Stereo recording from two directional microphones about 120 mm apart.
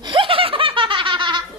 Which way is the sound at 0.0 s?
45° right (ahead or behind).